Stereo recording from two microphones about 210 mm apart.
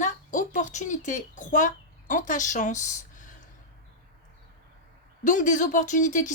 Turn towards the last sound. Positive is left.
turn(degrees=35)  # may be behind; listen again after turning